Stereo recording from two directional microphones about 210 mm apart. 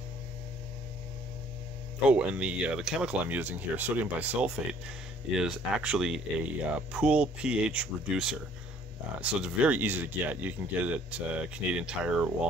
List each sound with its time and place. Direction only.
2.0 s speech: 5° right (ahead or behind)